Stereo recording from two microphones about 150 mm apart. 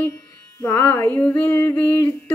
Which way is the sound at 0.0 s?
20° left (ahead or behind).